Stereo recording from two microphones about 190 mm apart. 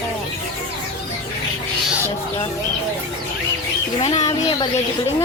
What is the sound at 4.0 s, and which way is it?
Speech, 35° left (ahead or behind).